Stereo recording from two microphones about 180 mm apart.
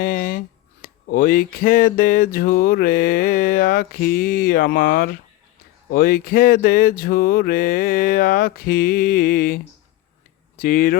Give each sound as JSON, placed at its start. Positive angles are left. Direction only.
{"t": 0.0, "sound": "speech", "side_deg": 50}
{"t": 10.6, "sound": "speech", "side_deg": 50}